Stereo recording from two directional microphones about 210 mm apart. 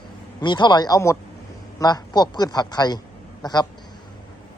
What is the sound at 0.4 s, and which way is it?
Speech, 20° left (ahead or behind).